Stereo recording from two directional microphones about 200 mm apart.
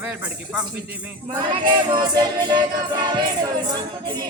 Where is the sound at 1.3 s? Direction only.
25° right (ahead or behind).